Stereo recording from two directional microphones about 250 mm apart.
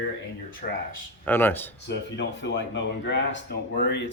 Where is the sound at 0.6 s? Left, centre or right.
Left.